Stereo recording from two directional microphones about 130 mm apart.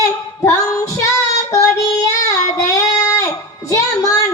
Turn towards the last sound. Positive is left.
turn(degrees=25)  # may be behind; listen again after turning